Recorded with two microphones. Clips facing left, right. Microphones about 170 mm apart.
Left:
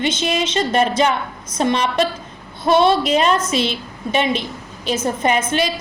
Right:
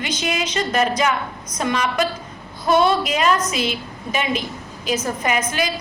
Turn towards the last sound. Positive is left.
turn(degrees=25)  # may be behind; listen again after turning